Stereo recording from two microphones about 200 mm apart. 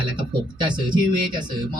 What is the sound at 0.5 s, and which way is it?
Speech, 20° right (ahead or behind).